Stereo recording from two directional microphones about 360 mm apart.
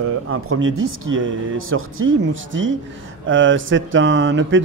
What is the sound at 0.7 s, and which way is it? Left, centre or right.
Speech, right.